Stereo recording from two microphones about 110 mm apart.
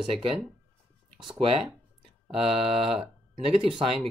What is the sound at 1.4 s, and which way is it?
Speech, 60° right (ahead or behind).